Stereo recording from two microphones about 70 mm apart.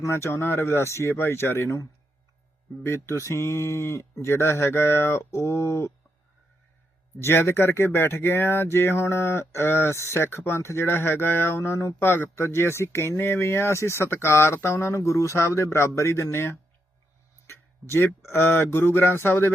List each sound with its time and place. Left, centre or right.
0.0 s speech: left
7.2 s speech: left